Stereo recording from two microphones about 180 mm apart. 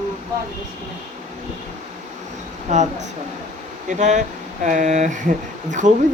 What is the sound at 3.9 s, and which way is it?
Speech, 40° right (ahead or behind).